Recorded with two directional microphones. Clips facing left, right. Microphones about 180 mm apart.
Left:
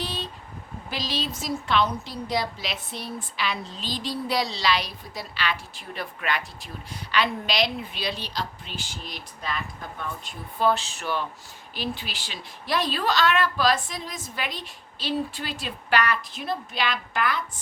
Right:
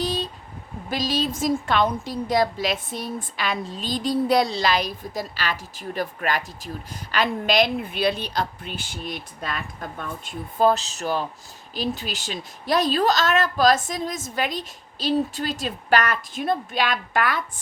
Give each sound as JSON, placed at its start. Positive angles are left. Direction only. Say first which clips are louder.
{"t": 0.0, "sound": "vehicle", "louder": "right 7 dB", "side_deg": -40}
{"t": 0.9, "sound": "a woman's voice", "louder": "right 6 dB", "side_deg": -45}
{"t": 10.6, "sound": "a woman's voice", "louder": "right 4 dB", "side_deg": -40}